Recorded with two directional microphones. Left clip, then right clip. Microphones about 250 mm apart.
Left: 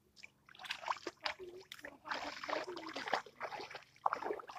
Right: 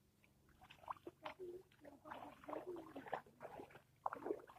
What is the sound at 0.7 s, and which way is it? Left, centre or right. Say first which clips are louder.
Rowboat: left 12 dB; centre.